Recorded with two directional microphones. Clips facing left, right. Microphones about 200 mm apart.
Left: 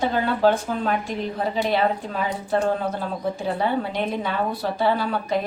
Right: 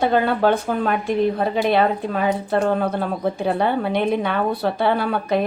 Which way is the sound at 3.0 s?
60° right (ahead or behind).